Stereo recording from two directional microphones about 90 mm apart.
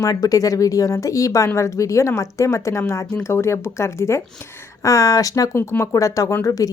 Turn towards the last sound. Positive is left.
turn(degrees=35)  # may be behind; listen again after turning